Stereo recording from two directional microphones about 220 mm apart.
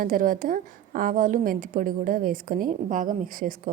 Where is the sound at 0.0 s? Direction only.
40° right (ahead or behind).